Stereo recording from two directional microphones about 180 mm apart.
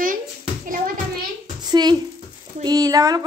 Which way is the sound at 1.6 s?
25° right (ahead or behind).